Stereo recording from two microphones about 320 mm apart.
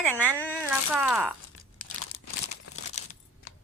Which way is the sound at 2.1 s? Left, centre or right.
Left.